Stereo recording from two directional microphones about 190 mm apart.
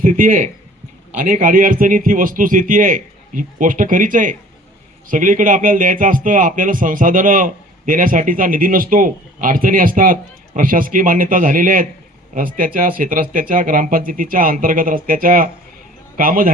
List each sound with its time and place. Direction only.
0.0 s a man's voice: 45° right (ahead or behind)